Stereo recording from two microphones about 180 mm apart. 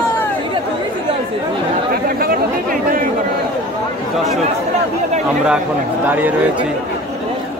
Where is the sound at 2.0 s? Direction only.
55° right (ahead or behind).